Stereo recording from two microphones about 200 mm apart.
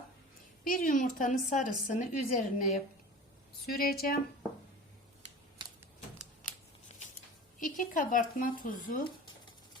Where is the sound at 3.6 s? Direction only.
50° left (ahead or behind).